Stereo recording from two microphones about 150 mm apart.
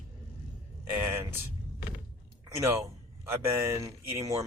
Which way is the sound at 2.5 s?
20° right (ahead or behind).